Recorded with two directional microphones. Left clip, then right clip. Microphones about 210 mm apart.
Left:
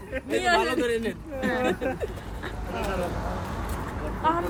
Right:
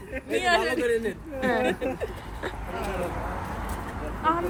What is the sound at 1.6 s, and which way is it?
Speech, 50° left (ahead or behind).